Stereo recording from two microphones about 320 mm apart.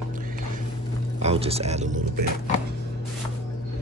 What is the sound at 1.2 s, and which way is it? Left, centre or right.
Speech, centre.